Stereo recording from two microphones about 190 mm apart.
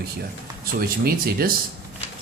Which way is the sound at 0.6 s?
50° right (ahead or behind).